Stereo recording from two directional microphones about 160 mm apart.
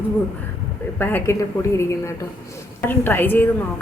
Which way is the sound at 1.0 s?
15° left (ahead or behind).